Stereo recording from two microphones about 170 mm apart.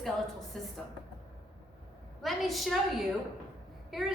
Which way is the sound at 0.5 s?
Centre (ahead or behind).